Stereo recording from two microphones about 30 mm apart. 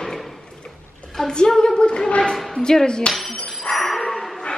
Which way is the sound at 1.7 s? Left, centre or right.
Left.